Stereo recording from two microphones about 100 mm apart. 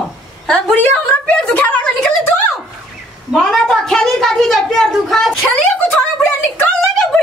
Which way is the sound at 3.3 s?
Centre (ahead or behind).